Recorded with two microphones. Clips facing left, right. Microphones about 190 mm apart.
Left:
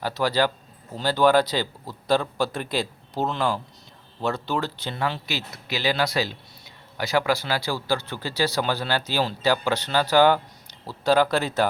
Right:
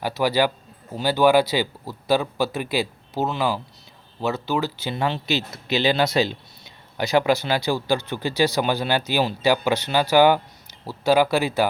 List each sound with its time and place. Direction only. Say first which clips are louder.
0.0 s speech: right 2 dB; 10° right (ahead or behind)
4.9 s speech: right 4 dB; 20° right (ahead or behind)